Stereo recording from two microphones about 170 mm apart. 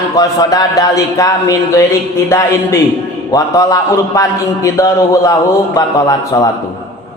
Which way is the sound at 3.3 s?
20° left (ahead or behind).